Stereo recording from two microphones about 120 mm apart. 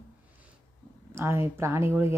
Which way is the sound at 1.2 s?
20° right (ahead or behind).